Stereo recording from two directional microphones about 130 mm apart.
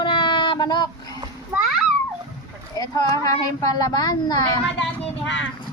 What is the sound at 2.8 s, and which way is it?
Speech, 30° left (ahead or behind).